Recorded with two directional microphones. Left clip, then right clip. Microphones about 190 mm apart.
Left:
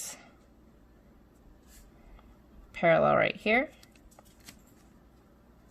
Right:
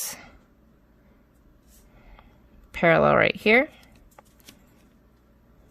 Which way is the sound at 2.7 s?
40° right (ahead or behind).